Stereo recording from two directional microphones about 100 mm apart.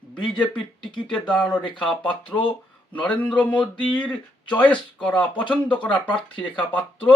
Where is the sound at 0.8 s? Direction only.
50° left (ahead or behind).